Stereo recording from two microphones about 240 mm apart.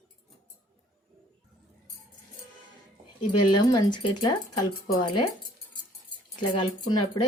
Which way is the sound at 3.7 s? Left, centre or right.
Centre.